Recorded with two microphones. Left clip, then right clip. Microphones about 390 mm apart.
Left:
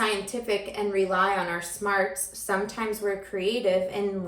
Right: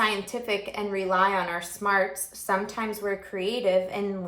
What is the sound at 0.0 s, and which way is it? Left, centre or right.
A woman's voice, centre.